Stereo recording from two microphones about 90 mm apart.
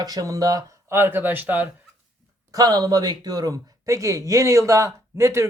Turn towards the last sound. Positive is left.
turn(degrees=-35)  # may be behind; listen again after turning